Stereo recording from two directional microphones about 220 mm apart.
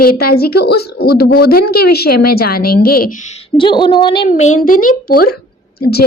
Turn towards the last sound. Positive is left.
turn(degrees=45)  # may be behind; listen again after turning